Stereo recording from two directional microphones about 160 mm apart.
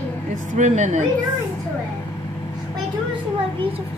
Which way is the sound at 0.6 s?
50° right (ahead or behind).